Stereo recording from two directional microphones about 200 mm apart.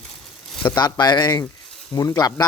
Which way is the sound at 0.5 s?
10° left (ahead or behind).